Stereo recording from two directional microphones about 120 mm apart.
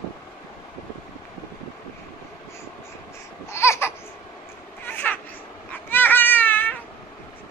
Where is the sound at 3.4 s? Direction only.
20° left (ahead or behind).